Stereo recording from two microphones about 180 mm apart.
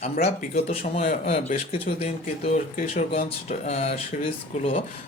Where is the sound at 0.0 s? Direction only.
35° left (ahead or behind).